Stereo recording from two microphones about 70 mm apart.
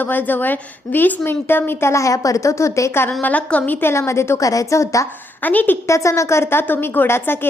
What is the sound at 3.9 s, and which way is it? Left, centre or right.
A woman's voice, left.